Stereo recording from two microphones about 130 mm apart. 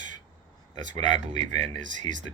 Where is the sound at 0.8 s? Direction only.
65° right (ahead or behind).